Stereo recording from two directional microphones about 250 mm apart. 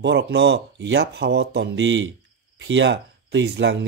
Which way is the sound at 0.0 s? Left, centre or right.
Right.